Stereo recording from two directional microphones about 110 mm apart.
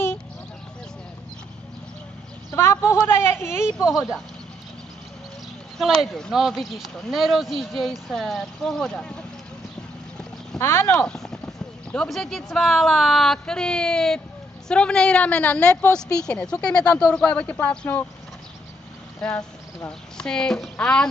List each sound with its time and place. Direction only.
2.5 s a sound: 25° left (ahead or behind)
3.3 s speech: 20° left (ahead or behind)
3.8 s speech: centre (ahead or behind)
5.8 s speech: centre (ahead or behind)
10.6 s speech: 20° left (ahead or behind)
11.1 s a woman's voice: 5° left (ahead or behind)
19.2 s a woman's voice: 5° left (ahead or behind)